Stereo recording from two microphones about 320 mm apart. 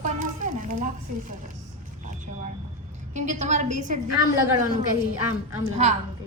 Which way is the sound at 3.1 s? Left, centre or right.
Right.